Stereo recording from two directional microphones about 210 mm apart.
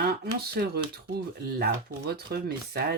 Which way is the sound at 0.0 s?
50° right (ahead or behind).